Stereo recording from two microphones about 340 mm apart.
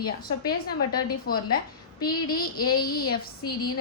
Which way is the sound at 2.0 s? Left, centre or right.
Centre.